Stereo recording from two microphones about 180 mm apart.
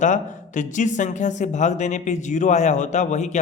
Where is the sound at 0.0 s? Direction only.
45° left (ahead or behind).